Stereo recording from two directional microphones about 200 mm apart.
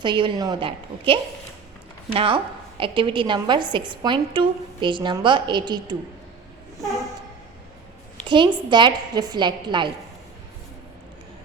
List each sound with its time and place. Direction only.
0.0 s a woman's voice: 25° right (ahead or behind)
8.2 s a woman's voice: 25° right (ahead or behind)